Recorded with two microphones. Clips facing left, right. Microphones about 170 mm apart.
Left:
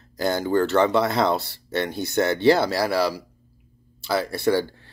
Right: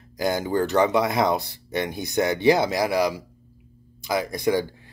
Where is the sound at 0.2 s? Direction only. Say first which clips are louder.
Left 2 dB; 15° right (ahead or behind).